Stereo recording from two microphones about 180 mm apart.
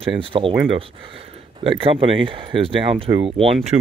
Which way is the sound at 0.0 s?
30° right (ahead or behind).